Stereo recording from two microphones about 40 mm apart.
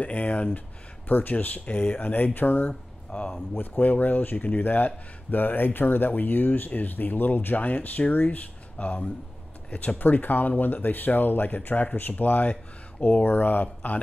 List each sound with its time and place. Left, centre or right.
0.0 s speech: left
1.0 s speech: left
1.3 s speech: left
3.1 s speech: left